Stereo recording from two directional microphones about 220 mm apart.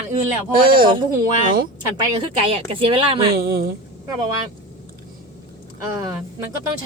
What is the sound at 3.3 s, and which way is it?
Speech, 45° right (ahead or behind).